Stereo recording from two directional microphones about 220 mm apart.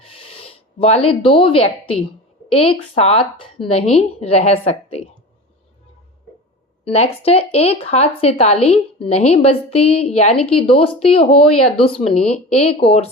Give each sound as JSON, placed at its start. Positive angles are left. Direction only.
{"t": 0.0, "sound": "a sound", "side_deg": 25}
{"t": 2.5, "sound": "speech", "side_deg": 25}
{"t": 6.8, "sound": "speech", "side_deg": 30}